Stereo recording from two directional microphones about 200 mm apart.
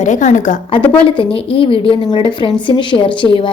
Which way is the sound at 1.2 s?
25° left (ahead or behind).